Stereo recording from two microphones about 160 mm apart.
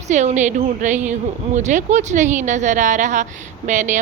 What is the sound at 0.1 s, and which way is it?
A woman's voice, 45° right (ahead or behind).